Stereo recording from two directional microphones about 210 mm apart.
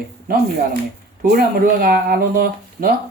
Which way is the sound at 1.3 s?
45° right (ahead or behind).